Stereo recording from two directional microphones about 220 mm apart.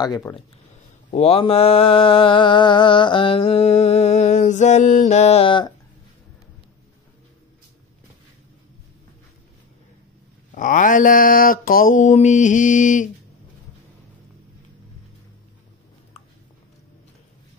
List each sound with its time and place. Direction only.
0.0 s speech: 15° left (ahead or behind)
1.1 s mantra: 25° left (ahead or behind)
10.5 s mantra: 35° left (ahead or behind)